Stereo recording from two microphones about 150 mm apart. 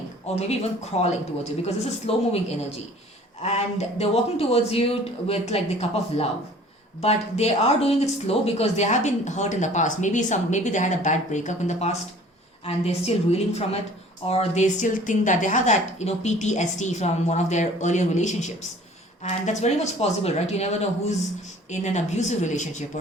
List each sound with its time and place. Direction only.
0.3 s speech: 45° left (ahead or behind)
3.4 s speech: 45° left (ahead or behind)